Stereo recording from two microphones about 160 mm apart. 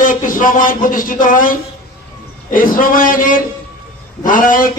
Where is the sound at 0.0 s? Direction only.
55° left (ahead or behind).